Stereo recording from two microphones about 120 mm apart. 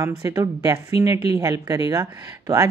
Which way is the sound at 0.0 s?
25° right (ahead or behind).